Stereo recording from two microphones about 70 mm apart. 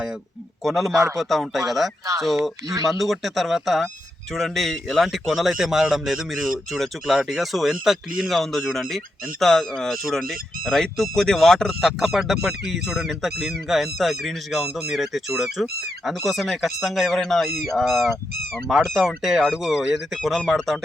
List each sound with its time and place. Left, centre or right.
0.6 s speech: centre
0.9 s a man's voice: right
1.2 s speech: centre